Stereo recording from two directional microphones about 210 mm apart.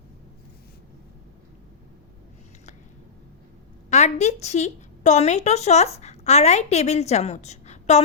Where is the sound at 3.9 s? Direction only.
30° left (ahead or behind).